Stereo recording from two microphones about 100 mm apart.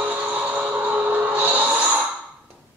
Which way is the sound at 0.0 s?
15° right (ahead or behind).